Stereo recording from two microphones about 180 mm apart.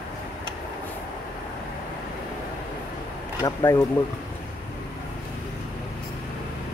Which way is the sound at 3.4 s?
15° left (ahead or behind).